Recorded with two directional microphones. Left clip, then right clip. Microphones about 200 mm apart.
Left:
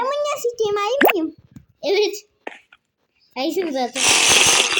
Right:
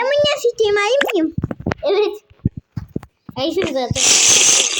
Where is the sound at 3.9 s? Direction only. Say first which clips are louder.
Right 1 dB; centre (ahead or behind).